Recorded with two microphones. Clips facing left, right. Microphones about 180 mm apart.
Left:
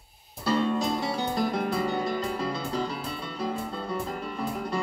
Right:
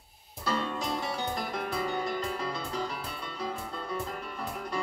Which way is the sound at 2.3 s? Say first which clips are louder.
Left 4 dB; 35° left (ahead or behind).